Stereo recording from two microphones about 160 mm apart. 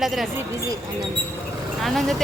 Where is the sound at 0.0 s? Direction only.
Centre (ahead or behind).